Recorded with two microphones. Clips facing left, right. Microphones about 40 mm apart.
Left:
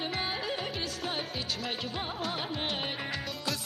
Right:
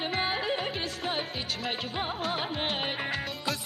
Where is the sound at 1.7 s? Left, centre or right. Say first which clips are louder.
Right 3 dB; right.